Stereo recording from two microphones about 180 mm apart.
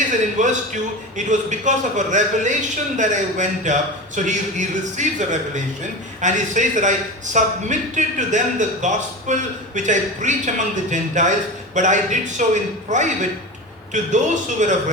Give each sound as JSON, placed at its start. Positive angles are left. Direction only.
{"t": 0.1, "sound": "a man's voice", "side_deg": -45}